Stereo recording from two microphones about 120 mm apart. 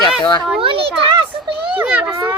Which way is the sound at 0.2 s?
40° left (ahead or behind).